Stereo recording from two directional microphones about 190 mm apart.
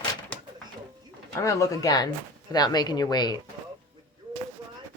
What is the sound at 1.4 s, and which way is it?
A woman's voice, 15° left (ahead or behind).